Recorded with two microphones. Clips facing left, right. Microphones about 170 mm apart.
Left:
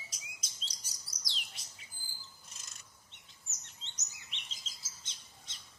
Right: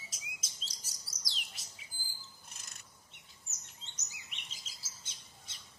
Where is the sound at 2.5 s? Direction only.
55° right (ahead or behind).